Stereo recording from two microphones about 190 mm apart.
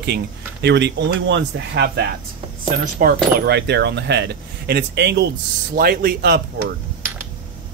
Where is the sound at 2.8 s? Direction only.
45° right (ahead or behind).